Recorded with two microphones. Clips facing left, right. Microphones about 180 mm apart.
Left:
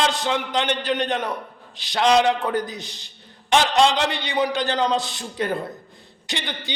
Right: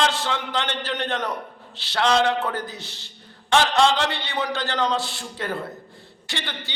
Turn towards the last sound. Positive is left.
turn(degrees=15)  # may be behind; listen again after turning